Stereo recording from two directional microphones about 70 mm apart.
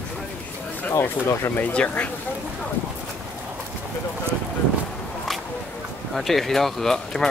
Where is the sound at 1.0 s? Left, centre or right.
Left.